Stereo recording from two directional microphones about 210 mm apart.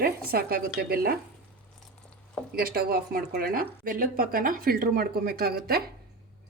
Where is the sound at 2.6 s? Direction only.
45° right (ahead or behind).